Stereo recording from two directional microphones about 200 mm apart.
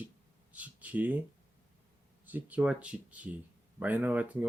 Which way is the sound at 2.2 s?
10° right (ahead or behind).